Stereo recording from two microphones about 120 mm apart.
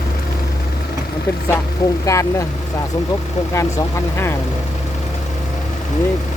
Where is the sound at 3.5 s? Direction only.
25° left (ahead or behind).